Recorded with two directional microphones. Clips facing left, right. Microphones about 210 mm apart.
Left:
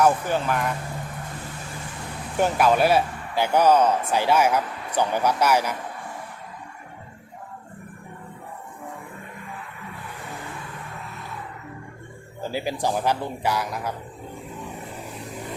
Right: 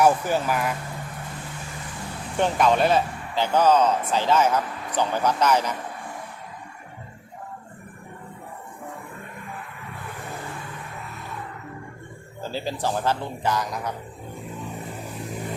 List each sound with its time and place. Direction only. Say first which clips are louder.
0.0 s speech: right 1 dB; 5° right (ahead or behind)
2.4 s speech: left 1 dB; 5° left (ahead or behind)
12.4 s speech: left 2 dB; 15° left (ahead or behind)